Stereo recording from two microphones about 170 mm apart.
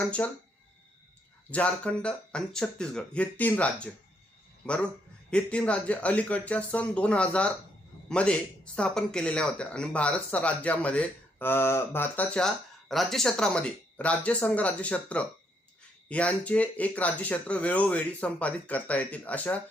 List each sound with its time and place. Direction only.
0.2 s speech: 10° left (ahead or behind)
1.5 s speech: 10° left (ahead or behind)